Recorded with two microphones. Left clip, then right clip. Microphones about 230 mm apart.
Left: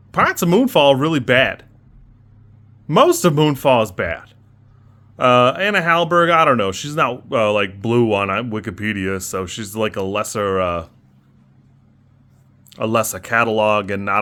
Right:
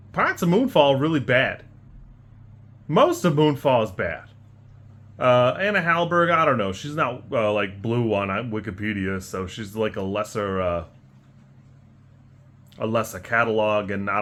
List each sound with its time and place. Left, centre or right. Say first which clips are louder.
0.1 s speech: left 6 dB; left
2.8 s speech: left 5 dB; left
12.7 s speech: left 6 dB; left